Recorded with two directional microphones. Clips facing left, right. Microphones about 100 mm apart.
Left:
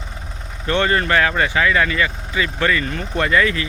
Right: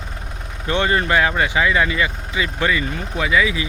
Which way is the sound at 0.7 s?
15° right (ahead or behind).